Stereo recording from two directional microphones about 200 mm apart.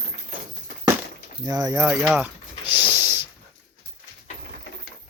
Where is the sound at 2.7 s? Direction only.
10° right (ahead or behind).